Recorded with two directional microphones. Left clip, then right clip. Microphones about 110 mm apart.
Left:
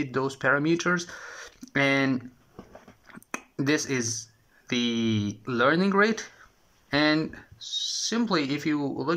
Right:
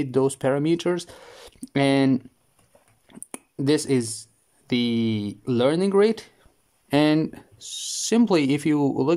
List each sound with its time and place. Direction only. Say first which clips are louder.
0.0 s speech: right 4 dB; 55° right (ahead or behind)
3.1 s a sound: left 5 dB; 50° right (ahead or behind)
4.6 s speech: right 3 dB; 45° right (ahead or behind)
6.9 s speech: right 3 dB; 65° right (ahead or behind)
8.1 s speech: right 9 dB; 85° right